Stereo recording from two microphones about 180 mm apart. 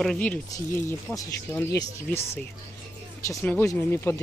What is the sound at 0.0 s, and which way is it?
Speech, 5° left (ahead or behind).